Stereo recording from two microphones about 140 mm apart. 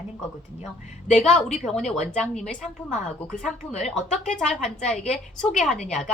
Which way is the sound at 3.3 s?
55° left (ahead or behind).